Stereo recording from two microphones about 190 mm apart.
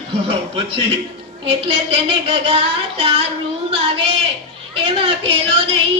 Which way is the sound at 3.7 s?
30° right (ahead or behind).